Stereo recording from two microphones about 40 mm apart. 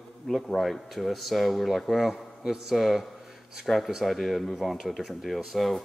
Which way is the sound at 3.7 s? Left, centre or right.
Centre.